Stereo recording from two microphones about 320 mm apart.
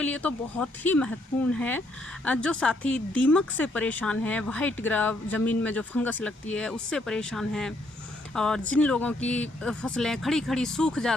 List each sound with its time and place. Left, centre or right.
0.0 s speech: centre